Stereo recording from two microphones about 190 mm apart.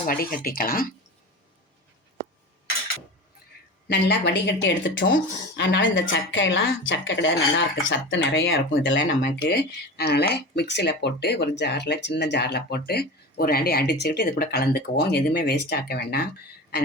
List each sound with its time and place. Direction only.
0.0 s speech: 50° left (ahead or behind)
3.8 s a woman's voice: 65° left (ahead or behind)